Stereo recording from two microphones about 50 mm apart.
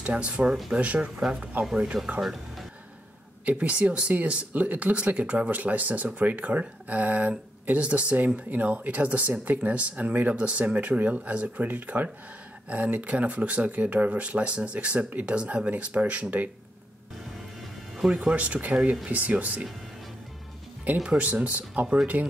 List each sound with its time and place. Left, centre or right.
0.1 s speech: right
2.0 s speech: centre
3.4 s speech: right
17.9 s speech: centre
18.3 s speech: right
20.9 s speech: right